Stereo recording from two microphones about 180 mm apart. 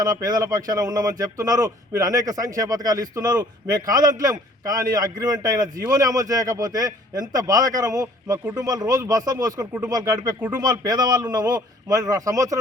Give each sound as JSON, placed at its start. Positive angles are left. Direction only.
{"t": 0.0, "sound": "a man's voice", "side_deg": -20}